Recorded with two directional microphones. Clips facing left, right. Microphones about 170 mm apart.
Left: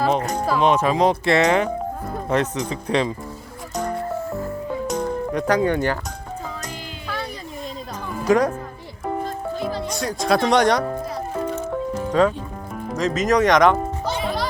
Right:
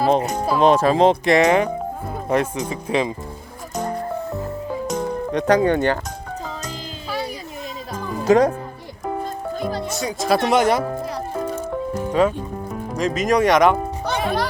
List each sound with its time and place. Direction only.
0.0 s speech: 30° right (ahead or behind)
0.3 s speech: 20° right (ahead or behind)
0.6 s speech: 35° right (ahead or behind); by 3.1 s 15° right (ahead or behind)
4.9 s music: centre (ahead or behind)
5.3 s speech: 25° right (ahead or behind)
8.2 s speech: 25° right (ahead or behind)
9.9 s speech: centre (ahead or behind)
11.4 s music: 10° right (ahead or behind)
12.9 s speech: 10° right (ahead or behind)
14.1 s music: 60° right (ahead or behind)